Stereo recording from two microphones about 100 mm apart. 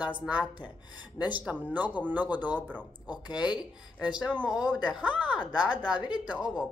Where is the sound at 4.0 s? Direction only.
15° right (ahead or behind).